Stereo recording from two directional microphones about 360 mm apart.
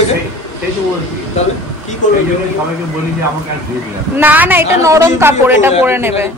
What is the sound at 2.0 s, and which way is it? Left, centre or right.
Speech, left.